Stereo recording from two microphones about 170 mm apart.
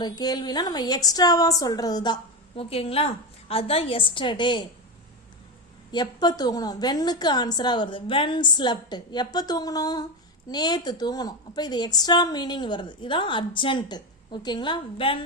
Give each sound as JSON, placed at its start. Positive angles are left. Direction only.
{"t": 0.0, "sound": "a woman's voice", "side_deg": 25}
{"t": 2.6, "sound": "a woman's voice", "side_deg": 35}
{"t": 5.9, "sound": "a woman's voice", "side_deg": 25}